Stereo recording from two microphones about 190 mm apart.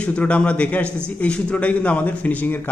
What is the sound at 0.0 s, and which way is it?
A man's voice, 5° left (ahead or behind).